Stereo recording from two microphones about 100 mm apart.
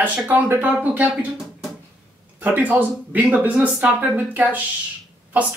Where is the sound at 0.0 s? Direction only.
15° right (ahead or behind).